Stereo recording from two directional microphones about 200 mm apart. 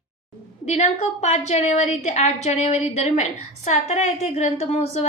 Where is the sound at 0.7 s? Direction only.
35° left (ahead or behind).